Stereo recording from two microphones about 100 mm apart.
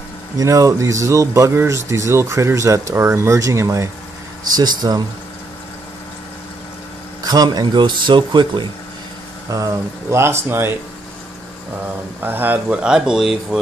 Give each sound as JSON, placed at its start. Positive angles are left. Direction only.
{"t": 0.4, "sound": "speech", "side_deg": -35}
{"t": 7.2, "sound": "speech", "side_deg": -40}
{"t": 9.5, "sound": "speech", "side_deg": -35}
{"t": 12.2, "sound": "speech", "side_deg": -20}